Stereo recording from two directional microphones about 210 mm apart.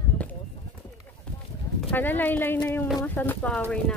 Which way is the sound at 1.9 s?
10° left (ahead or behind).